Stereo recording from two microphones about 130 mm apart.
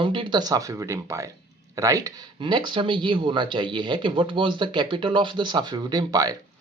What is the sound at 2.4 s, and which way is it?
Speech, 35° right (ahead or behind).